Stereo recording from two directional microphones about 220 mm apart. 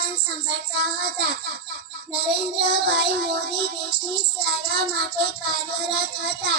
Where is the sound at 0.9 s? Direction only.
50° right (ahead or behind).